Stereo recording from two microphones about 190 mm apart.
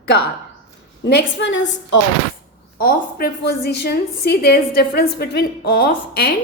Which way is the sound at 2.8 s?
55° left (ahead or behind).